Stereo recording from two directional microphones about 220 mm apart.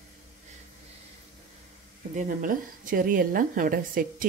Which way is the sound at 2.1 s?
40° right (ahead or behind).